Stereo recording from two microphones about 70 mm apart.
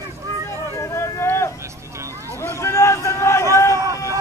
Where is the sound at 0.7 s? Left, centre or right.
Left.